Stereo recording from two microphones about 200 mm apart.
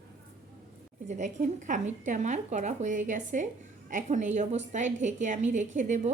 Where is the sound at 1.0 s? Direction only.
40° right (ahead or behind).